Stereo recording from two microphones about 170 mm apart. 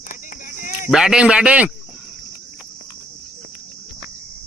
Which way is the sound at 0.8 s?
5° right (ahead or behind).